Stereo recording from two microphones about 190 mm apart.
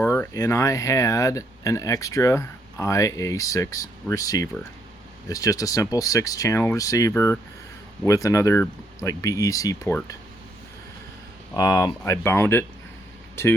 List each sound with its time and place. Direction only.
0.0 s speech: 15° left (ahead or behind)
11.5 s speech: 20° left (ahead or behind)